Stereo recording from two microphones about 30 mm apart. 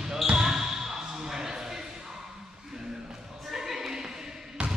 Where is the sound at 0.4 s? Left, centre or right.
Centre.